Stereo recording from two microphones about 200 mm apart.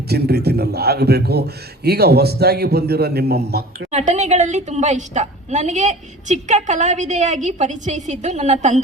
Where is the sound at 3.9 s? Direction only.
35° right (ahead or behind).